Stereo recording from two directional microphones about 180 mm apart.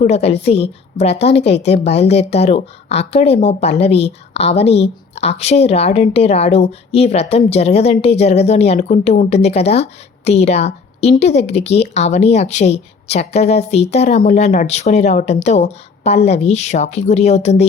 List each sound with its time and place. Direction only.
0.0 s a woman's voice: 35° left (ahead or behind)